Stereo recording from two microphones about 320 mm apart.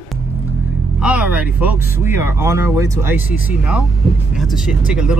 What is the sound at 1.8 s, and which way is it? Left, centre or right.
Speech, centre.